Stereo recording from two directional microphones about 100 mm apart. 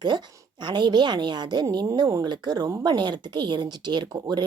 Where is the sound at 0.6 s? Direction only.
50° right (ahead or behind).